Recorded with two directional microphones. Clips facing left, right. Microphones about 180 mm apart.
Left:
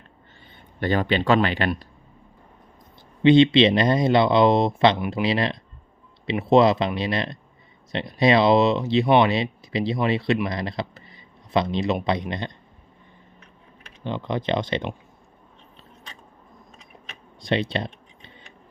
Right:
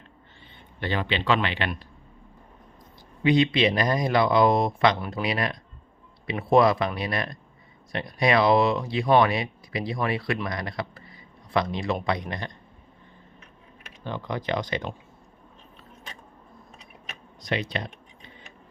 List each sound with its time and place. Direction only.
0.8 s speech: 45° left (ahead or behind)
3.2 s speech: 25° left (ahead or behind)
14.0 s speech: 20° left (ahead or behind)
17.4 s speech: 30° left (ahead or behind)